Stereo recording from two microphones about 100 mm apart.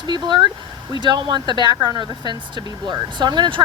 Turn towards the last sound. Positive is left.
turn(degrees=-50)  # may be behind; listen again after turning